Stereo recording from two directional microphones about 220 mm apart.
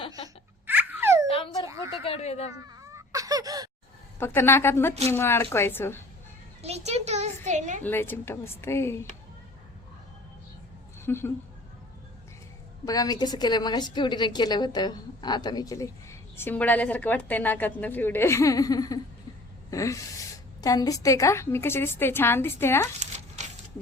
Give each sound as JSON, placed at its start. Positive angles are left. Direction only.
{"t": 0.7, "sound": "dog", "side_deg": -10}
{"t": 1.6, "sound": "a sound", "side_deg": -15}
{"t": 2.0, "sound": "a sound", "side_deg": 30}
{"t": 2.6, "sound": "fowl", "side_deg": -15}
{"t": 4.2, "sound": "a woman's voice", "side_deg": 10}
{"t": 6.6, "sound": "a sound", "side_deg": -30}
{"t": 7.8, "sound": "a woman's voice", "side_deg": 10}
{"t": 11.0, "sound": "speech", "side_deg": 10}
{"t": 12.8, "sound": "a woman's voice", "side_deg": 15}
{"t": 23.0, "sound": "crumpling", "side_deg": -30}